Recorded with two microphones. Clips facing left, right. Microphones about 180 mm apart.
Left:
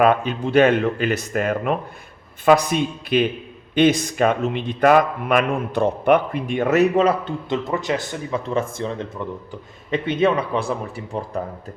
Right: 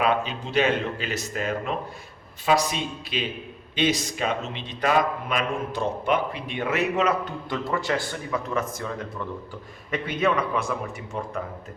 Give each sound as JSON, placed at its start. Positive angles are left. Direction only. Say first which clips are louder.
{"t": 0.0, "sound": "a man's voice", "louder": "left 7 dB", "side_deg": 55}